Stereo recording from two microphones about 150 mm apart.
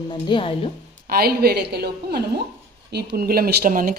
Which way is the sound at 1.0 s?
85° right.